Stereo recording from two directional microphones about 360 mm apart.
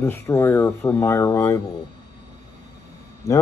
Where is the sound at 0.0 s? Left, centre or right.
Centre.